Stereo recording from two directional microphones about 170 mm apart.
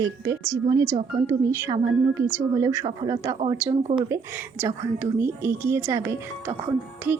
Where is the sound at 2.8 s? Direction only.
30° right (ahead or behind).